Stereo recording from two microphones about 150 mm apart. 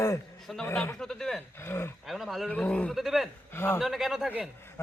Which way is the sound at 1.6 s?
15° left (ahead or behind).